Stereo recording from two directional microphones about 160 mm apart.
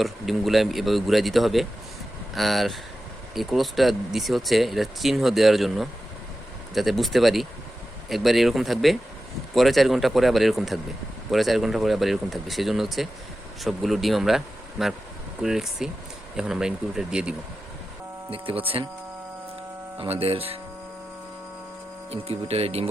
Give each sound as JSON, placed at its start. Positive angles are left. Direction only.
{"t": 0.0, "sound": "speech", "side_deg": 0}
{"t": 18.3, "sound": "speech", "side_deg": -35}
{"t": 20.0, "sound": "speech", "side_deg": -35}
{"t": 22.1, "sound": "speech", "side_deg": -40}